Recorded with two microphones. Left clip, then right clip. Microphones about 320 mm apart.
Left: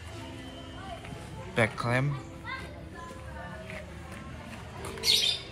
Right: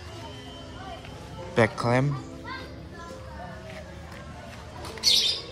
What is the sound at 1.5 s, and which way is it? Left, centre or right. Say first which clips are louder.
Speech: right 5 dB; centre.